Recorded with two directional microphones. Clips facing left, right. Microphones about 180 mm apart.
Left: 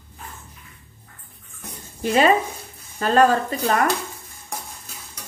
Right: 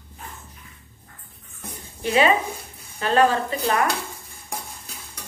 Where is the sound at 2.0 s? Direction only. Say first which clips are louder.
Left 2 dB; 40° left (ahead or behind).